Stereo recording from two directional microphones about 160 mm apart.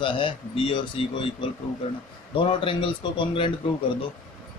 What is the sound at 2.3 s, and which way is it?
Speech, 35° left (ahead or behind).